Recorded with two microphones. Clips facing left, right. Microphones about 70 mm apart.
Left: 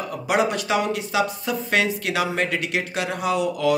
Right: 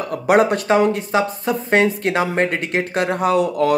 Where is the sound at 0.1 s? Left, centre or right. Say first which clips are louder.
Right 7 dB; right.